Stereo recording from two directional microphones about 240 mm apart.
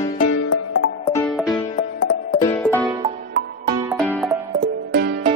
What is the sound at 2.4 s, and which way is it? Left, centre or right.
Music, centre.